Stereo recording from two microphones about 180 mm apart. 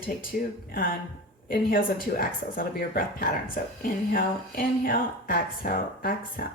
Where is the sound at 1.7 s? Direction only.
50° left (ahead or behind).